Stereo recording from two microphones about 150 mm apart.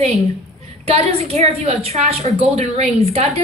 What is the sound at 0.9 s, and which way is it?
A woman's voice, 45° right (ahead or behind).